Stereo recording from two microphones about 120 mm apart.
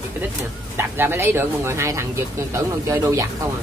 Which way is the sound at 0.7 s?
20° right (ahead or behind).